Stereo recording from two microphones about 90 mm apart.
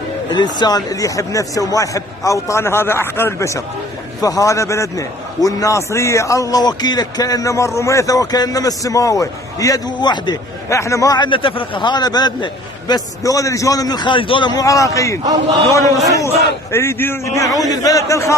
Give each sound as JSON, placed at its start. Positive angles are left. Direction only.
{"t": 0.3, "sound": "a man's voice", "side_deg": 55}
{"t": 9.8, "sound": "a man's voice", "side_deg": 55}
{"t": 10.7, "sound": "a man's voice", "side_deg": 35}
{"t": 11.1, "sound": "a man's voice", "side_deg": 70}
{"t": 14.5, "sound": "a man's voice", "side_deg": 40}
{"t": 17.5, "sound": "a man's voice", "side_deg": 40}